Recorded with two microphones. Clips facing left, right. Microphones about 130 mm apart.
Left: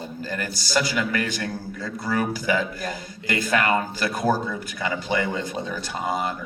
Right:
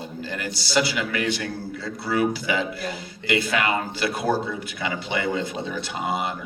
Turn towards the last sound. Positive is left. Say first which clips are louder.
# even
turn(degrees=40)  # may be behind; listen again after turning